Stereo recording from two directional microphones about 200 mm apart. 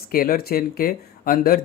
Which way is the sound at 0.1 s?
45° left (ahead or behind).